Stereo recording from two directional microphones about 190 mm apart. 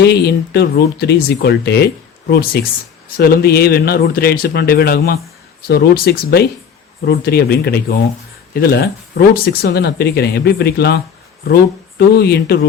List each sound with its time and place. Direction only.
0.0 s speech: 60° left (ahead or behind)